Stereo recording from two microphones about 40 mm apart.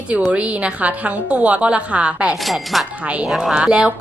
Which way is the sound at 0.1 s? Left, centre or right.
Right.